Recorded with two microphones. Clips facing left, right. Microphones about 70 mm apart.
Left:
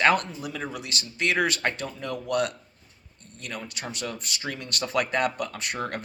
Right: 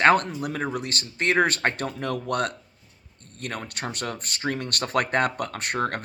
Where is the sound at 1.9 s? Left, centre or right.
Right.